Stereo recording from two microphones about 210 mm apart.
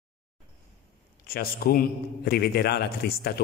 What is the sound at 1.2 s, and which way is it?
A man's voice, 45° left (ahead or behind).